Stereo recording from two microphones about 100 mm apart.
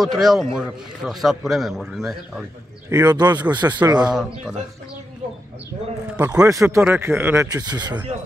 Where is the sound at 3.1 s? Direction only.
45° right (ahead or behind).